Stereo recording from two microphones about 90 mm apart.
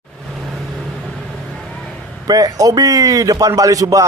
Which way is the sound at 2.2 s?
45° right (ahead or behind).